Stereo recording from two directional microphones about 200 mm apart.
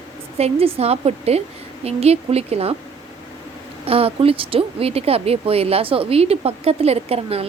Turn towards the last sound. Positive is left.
turn(degrees=-30)  # may be behind; listen again after turning